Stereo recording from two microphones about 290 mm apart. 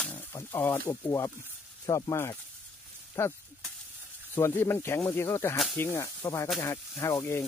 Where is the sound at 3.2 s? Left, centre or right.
Centre.